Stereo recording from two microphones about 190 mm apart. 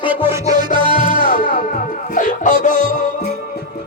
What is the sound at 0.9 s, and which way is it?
Music, 45° left (ahead or behind).